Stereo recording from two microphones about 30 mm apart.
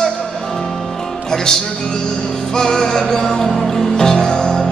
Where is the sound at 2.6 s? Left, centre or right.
Centre.